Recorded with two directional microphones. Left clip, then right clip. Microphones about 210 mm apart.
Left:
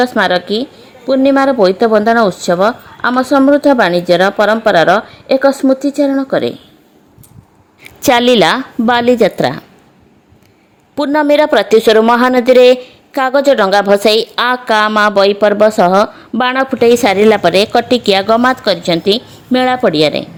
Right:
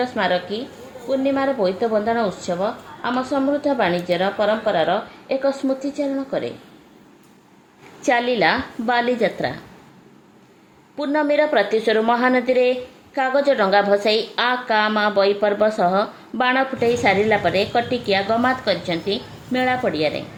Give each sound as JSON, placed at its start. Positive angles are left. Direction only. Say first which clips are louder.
{"t": 0.0, "sound": "a woman's voice", "louder": "left 9 dB", "side_deg": 50}
{"t": 8.0, "sound": "a woman's voice", "louder": "left 9 dB", "side_deg": 50}
{"t": 10.9, "sound": "a woman's voice", "louder": "left 9 dB", "side_deg": 45}